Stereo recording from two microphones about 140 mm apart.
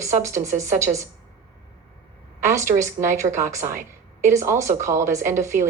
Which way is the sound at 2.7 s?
20° right (ahead or behind).